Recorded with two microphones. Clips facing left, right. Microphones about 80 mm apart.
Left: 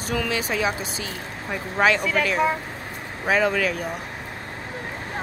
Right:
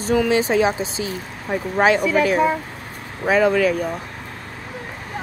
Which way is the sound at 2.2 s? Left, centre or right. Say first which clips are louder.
Right 5 dB; centre.